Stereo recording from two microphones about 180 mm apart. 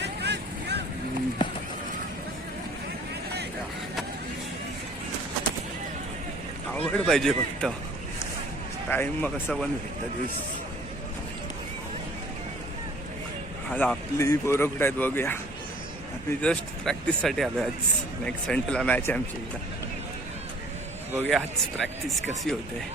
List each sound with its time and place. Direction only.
0.0 s vehicle: 70° right (ahead or behind)
6.7 s speech: centre (ahead or behind)
8.9 s speech: 10° left (ahead or behind)
13.7 s speech: 10° left (ahead or behind)
16.4 s speech: 5° left (ahead or behind)
21.2 s speech: 5° left (ahead or behind)